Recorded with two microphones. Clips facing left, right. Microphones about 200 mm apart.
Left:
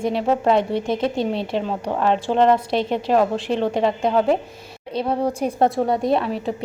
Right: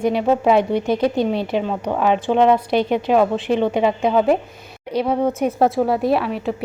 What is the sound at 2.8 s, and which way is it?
Speech, 30° left (ahead or behind).